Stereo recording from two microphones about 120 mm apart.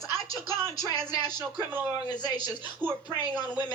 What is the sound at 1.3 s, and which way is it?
Speech, 15° right (ahead or behind).